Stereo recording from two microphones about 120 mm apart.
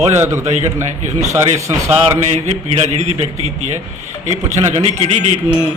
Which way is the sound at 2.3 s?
65° right (ahead or behind).